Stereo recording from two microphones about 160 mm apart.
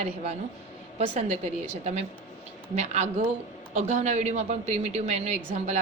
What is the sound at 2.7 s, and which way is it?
A woman's voice, 45° right (ahead or behind).